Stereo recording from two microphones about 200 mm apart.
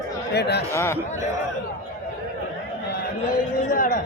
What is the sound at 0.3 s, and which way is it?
Speech, 55° left (ahead or behind).